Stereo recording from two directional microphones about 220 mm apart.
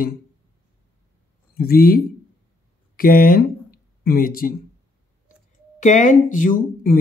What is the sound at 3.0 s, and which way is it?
Speech, 40° left (ahead or behind).